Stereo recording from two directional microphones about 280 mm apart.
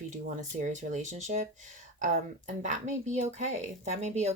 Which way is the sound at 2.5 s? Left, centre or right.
Right.